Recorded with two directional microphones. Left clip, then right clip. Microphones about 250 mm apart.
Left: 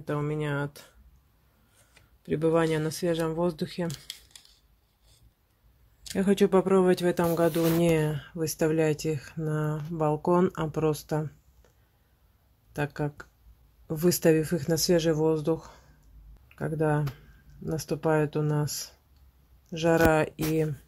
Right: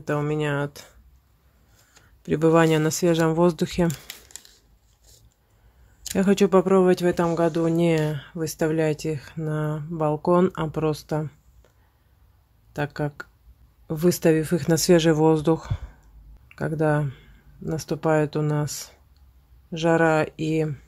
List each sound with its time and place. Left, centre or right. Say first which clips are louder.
0.0 s speech: right 6 dB; centre
2.2 s speech: right 6 dB; centre
6.0 s speech: right 4 dB; centre
12.7 s speech: right 4 dB; centre